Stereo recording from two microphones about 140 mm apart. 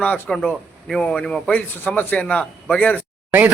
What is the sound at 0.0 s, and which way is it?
A man's voice, 5° left (ahead or behind).